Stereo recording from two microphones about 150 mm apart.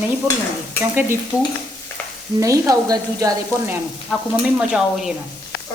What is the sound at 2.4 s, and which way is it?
Sizzle, 20° right (ahead or behind).